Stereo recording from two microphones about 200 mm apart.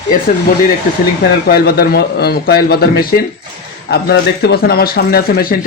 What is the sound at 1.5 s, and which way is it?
Speech, 50° left (ahead or behind).